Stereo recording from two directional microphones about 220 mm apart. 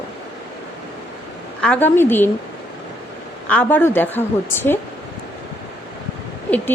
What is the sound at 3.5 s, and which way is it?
Speech, 5° left (ahead or behind).